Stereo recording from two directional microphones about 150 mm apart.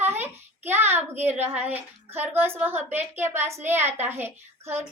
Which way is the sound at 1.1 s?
15° right (ahead or behind).